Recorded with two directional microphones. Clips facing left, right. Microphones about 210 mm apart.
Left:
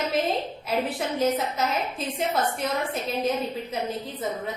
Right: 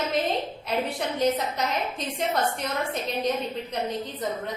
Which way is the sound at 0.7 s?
5° left (ahead or behind).